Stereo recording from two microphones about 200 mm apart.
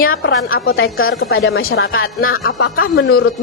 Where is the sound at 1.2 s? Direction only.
55° left (ahead or behind).